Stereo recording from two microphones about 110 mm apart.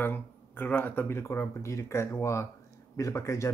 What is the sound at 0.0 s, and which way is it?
Speech, 15° left (ahead or behind).